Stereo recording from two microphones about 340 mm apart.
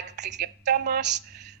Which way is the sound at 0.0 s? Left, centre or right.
Right.